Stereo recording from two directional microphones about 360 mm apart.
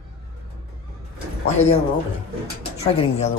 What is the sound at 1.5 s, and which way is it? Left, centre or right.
Speech, centre.